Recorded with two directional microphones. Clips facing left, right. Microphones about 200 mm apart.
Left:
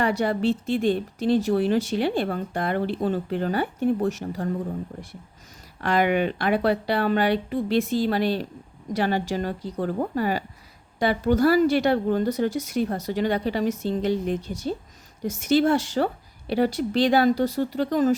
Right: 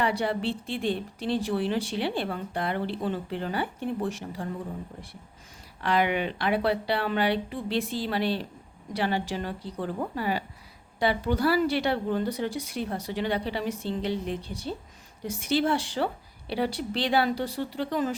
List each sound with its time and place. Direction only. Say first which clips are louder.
0.0 s speech: left 4 dB; 45° left (ahead or behind)
5.8 s speech: left 4 dB; 45° left (ahead or behind)